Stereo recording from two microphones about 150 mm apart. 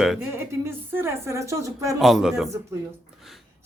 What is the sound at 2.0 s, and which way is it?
Speech, centre (ahead or behind).